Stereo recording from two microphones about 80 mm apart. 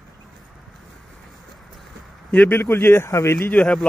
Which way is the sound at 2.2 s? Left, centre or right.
Left.